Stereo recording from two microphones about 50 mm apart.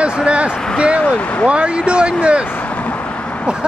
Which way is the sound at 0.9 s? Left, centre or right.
Left.